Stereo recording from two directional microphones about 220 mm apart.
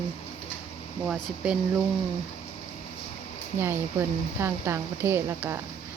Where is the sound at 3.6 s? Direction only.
10° right (ahead or behind).